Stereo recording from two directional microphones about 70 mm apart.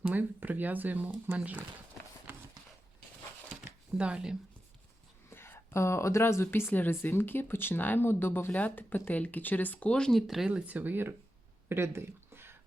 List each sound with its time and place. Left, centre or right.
0.0 s speech: right
3.6 s a sound: centre
5.3 s speech: left
9.9 s speech: centre
10.5 s speech: right
11.7 s a sound: right